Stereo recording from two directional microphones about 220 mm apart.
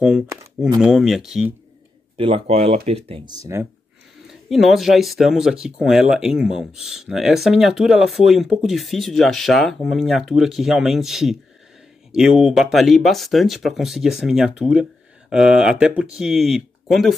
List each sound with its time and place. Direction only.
0.0 s speech: 5° right (ahead or behind)
2.1 s speech: 25° right (ahead or behind)
4.3 s speech: centre (ahead or behind)